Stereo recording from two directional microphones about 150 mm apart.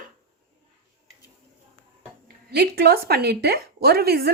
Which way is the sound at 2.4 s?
90° right.